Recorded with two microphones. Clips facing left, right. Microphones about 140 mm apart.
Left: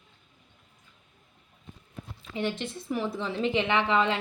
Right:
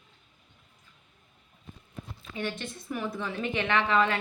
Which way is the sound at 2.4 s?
20° left (ahead or behind).